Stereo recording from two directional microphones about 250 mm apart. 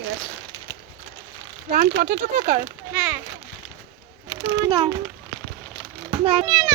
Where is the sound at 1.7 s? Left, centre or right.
Right.